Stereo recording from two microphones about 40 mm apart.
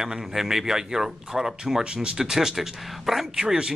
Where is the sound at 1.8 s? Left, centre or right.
Right; by 3.2 s centre.